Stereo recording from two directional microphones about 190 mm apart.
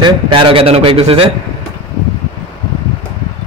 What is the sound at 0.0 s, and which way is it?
A man's voice, 30° right (ahead or behind).